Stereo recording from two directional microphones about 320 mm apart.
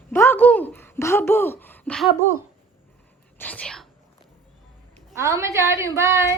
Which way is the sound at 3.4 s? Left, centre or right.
Centre.